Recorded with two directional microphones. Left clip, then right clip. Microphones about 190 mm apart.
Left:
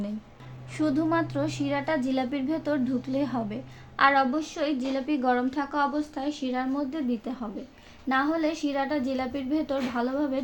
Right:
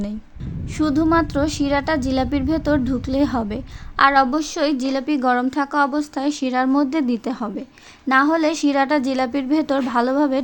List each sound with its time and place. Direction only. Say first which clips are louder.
0.8 s a woman's voice: right 8 dB; 40° right (ahead or behind)